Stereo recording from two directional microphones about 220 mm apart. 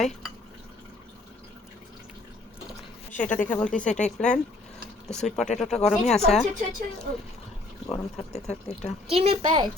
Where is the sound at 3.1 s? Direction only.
5° left (ahead or behind).